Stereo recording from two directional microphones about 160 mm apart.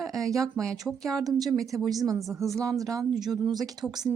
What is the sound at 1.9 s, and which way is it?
Speech, 20° right (ahead or behind).